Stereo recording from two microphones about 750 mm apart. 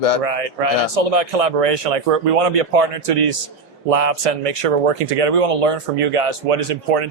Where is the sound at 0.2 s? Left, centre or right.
Right.